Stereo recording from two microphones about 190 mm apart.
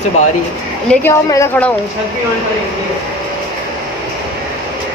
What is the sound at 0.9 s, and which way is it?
Speech, 10° left (ahead or behind).